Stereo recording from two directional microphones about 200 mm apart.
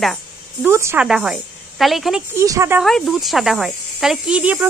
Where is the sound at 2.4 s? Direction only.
15° right (ahead or behind).